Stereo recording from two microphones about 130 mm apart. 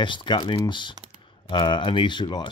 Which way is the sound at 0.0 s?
35° left (ahead or behind).